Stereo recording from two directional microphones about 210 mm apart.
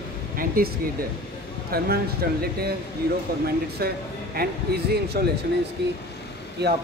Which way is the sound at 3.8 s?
45° right (ahead or behind).